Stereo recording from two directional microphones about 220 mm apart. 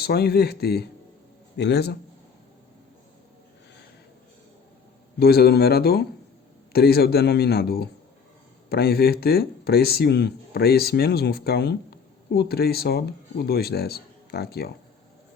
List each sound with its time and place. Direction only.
0.0 s speech: 45° left (ahead or behind)
5.2 s speech: 45° left (ahead or behind)